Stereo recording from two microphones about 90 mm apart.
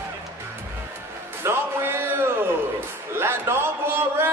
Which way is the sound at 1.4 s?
25° right (ahead or behind).